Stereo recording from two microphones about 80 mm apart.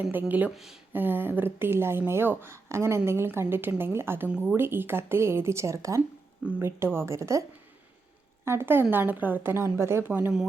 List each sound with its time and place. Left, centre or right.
0.1 s speech: right
0.5 s speech: centre
0.9 s speech: right
4.3 s speech: centre
4.5 s speech: right
8.4 s speech: right
10.1 s speech: centre